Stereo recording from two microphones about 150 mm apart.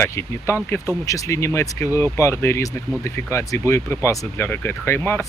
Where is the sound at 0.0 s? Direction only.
15° left (ahead or behind).